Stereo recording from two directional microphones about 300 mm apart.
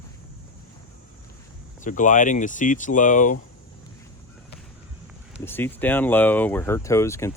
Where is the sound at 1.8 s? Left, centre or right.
Left.